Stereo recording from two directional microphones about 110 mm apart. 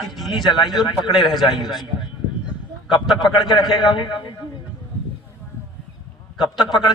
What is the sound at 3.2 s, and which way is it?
A man's voice, 45° left (ahead or behind).